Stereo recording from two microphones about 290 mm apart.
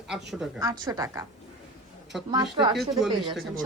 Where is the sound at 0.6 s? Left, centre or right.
Centre.